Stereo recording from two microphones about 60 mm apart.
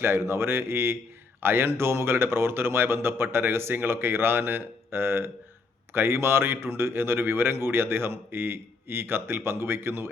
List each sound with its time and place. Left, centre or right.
0.0 s a man's voice: right